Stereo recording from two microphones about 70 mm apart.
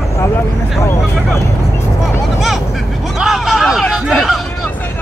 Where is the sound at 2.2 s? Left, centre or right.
Centre.